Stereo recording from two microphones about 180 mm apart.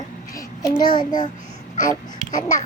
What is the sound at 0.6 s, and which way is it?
Speech, 20° left (ahead or behind).